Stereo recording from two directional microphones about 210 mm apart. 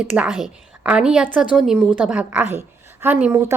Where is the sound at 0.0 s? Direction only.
5° right (ahead or behind).